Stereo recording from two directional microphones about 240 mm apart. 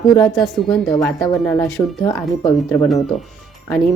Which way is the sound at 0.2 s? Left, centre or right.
Centre.